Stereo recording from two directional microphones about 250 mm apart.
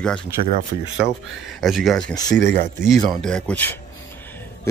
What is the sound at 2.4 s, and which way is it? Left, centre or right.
Speech, right.